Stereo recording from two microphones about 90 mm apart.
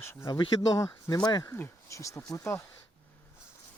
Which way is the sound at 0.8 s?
40° left (ahead or behind).